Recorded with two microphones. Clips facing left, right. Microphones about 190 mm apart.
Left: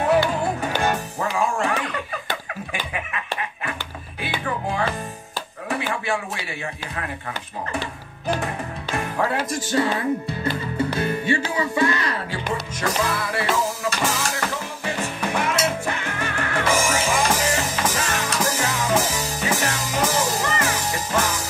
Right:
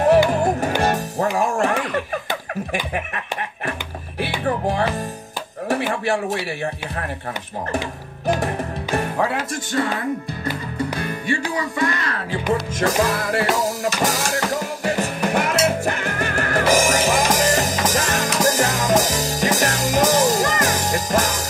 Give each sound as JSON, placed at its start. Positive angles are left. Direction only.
{"t": 0.0, "sound": "music", "side_deg": -45}
{"t": 10.8, "sound": "music", "side_deg": 25}
{"t": 11.5, "sound": "speech", "side_deg": 25}
{"t": 13.0, "sound": "music", "side_deg": -45}